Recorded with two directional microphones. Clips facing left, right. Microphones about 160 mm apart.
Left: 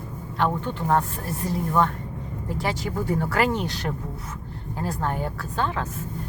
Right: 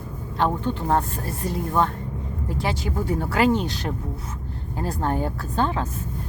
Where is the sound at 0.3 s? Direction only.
30° right (ahead or behind).